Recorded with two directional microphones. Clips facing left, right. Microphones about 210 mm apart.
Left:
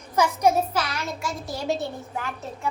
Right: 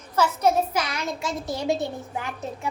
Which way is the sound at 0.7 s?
15° right (ahead or behind).